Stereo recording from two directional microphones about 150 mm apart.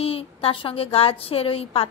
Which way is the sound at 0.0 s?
40° left (ahead or behind).